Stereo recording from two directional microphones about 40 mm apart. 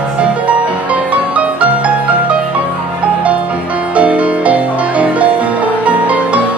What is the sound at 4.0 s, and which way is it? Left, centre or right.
Music, right.